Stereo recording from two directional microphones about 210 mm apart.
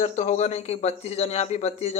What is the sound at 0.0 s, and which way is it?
Speech, 35° left (ahead or behind).